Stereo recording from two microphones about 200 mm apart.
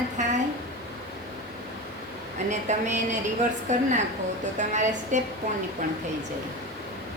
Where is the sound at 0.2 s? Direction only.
35° right (ahead or behind).